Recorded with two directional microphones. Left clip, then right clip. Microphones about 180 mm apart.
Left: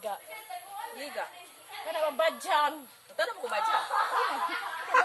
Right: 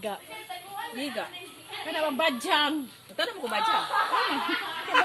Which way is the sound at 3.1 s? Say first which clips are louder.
Right 2 dB; 35° right (ahead or behind).